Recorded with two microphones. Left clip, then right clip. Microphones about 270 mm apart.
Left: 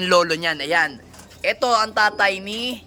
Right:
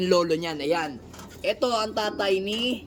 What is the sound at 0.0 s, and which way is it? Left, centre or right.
Speech, centre.